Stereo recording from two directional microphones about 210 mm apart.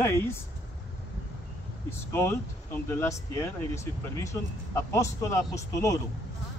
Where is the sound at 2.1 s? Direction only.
10° left (ahead or behind).